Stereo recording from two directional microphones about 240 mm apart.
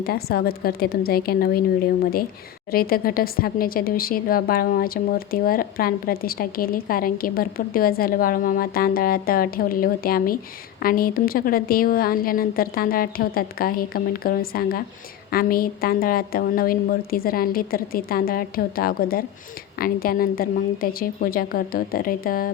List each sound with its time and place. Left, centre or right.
0.0 s a woman's voice: left
2.7 s a woman's voice: left